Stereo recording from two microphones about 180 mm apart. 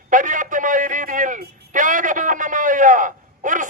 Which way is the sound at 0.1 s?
45° right (ahead or behind).